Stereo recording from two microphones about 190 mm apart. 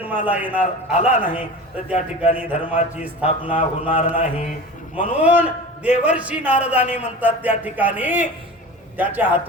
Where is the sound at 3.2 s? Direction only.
35° left (ahead or behind).